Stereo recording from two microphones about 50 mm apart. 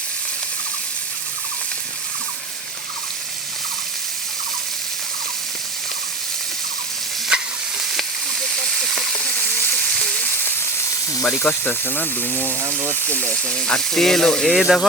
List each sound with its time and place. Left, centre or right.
7.3 s stir: centre
9.8 s frying: left
11.4 s speech: left
13.2 s speech: centre